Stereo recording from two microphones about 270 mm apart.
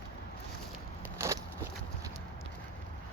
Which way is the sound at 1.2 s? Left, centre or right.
Centre.